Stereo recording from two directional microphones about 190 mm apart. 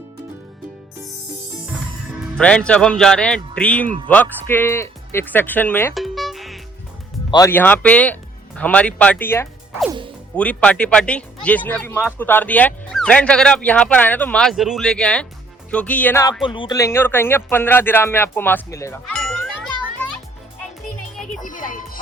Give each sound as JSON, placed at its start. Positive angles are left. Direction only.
{"t": 2.4, "sound": "speech", "side_deg": 5}
{"t": 5.9, "sound": "music", "side_deg": 0}
{"t": 7.3, "sound": "speech", "side_deg": 20}
{"t": 16.4, "sound": "speech", "side_deg": 25}
{"t": 19.1, "sound": "music", "side_deg": 0}
{"t": 21.4, "sound": "music", "side_deg": 45}